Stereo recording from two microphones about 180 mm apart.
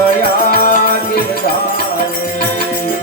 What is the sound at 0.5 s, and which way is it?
Music, 50° left (ahead or behind).